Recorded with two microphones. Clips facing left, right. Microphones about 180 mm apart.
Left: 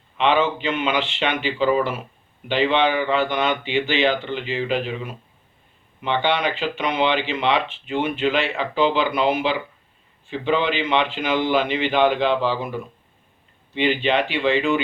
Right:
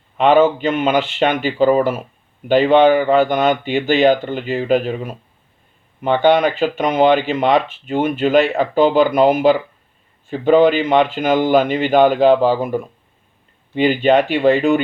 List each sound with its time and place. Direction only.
0.2 s speech: 45° right (ahead or behind)